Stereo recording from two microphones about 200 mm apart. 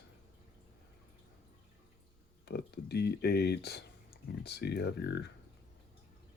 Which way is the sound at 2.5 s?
55° left (ahead or behind).